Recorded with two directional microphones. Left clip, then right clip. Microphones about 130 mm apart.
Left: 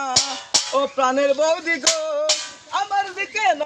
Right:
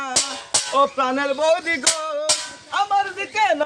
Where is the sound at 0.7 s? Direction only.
30° right (ahead or behind).